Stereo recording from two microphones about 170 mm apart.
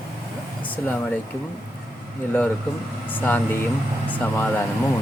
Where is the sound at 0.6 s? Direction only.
10° left (ahead or behind).